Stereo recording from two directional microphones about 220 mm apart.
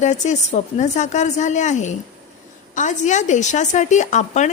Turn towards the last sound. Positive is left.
turn(degrees=35)  # may be behind; listen again after turning